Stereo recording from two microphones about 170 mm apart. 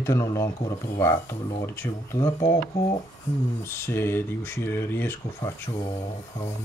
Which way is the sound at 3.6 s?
15° left (ahead or behind).